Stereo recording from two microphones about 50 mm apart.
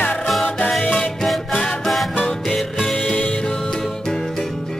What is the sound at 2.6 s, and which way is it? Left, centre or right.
Music, centre.